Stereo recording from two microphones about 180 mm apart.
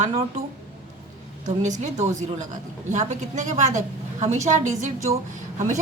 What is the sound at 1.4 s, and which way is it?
A woman's voice, 40° right (ahead or behind).